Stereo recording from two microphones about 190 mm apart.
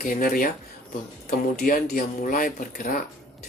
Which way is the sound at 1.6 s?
50° left (ahead or behind).